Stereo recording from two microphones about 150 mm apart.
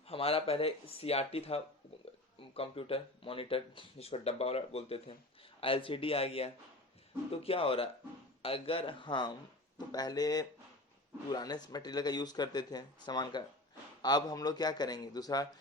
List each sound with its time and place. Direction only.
0.1 s speech: 40° left (ahead or behind)